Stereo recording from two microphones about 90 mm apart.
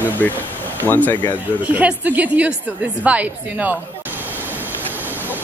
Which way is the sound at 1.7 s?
20° right (ahead or behind).